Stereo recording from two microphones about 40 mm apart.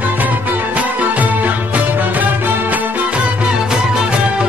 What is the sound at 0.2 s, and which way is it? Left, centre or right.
Music, right.